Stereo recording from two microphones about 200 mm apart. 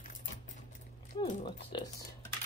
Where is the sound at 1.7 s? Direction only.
20° left (ahead or behind).